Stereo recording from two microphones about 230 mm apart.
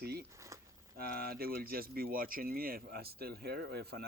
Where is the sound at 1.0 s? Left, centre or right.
Right.